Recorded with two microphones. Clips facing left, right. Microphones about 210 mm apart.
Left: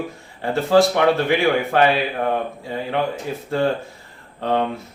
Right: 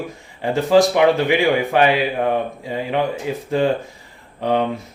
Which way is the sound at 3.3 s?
15° right (ahead or behind).